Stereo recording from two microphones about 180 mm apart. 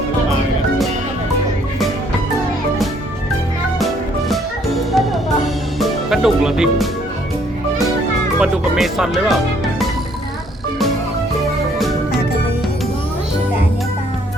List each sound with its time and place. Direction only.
4.9 s music: centre (ahead or behind)
8.4 s speech: 5° right (ahead or behind)